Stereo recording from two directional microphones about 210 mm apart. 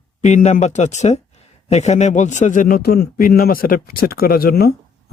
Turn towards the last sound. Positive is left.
turn(degrees=45)  # may be behind; listen again after turning